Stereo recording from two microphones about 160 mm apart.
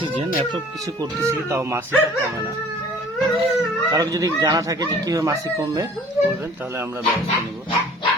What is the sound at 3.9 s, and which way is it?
Speech, 20° right (ahead or behind).